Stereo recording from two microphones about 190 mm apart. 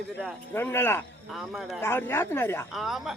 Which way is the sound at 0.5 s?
10° left (ahead or behind).